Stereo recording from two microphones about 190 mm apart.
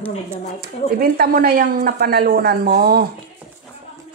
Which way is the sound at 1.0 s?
50° right (ahead or behind).